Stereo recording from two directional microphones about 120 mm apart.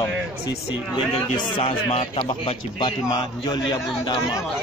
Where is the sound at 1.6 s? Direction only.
55° left (ahead or behind).